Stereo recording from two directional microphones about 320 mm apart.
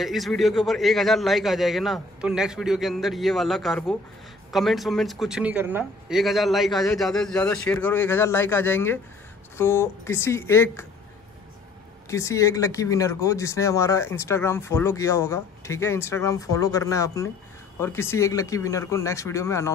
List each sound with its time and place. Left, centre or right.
0.0 s a man's voice: centre
12.1 s speech: centre